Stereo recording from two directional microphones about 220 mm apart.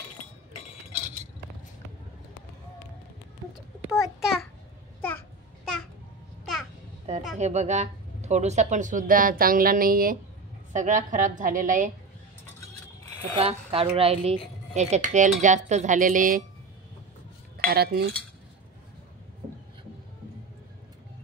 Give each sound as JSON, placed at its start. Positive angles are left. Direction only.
{"t": 3.9, "sound": "a sound", "side_deg": 0}
{"t": 7.3, "sound": "speech", "side_deg": -30}
{"t": 13.0, "sound": "speech", "side_deg": -25}
{"t": 17.6, "sound": "cutlery", "side_deg": -45}